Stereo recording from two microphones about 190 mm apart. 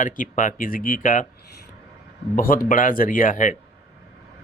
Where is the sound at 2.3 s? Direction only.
50° left (ahead or behind).